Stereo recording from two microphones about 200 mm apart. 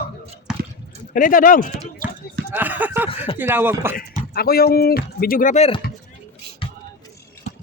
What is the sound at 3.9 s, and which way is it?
Speech, 50° left (ahead or behind).